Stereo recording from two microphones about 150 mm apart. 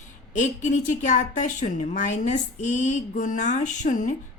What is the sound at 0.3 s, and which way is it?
A woman's voice, 55° left (ahead or behind).